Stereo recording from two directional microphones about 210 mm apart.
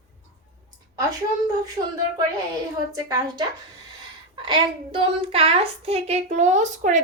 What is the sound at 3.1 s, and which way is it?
Speech, 15° right (ahead or behind).